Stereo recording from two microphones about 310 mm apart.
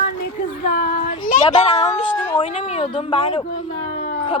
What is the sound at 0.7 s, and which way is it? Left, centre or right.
Child singing, left.